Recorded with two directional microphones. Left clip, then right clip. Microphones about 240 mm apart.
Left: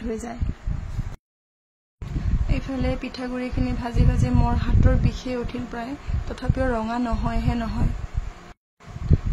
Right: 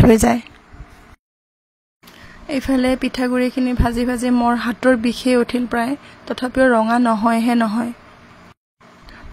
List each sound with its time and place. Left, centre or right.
0.1 s speech: right
2.4 s speech: right